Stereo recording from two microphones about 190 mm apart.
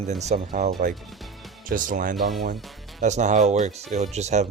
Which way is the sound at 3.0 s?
40° right (ahead or behind).